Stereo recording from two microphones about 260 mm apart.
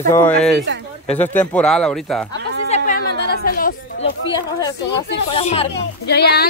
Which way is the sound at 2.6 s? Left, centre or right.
Left.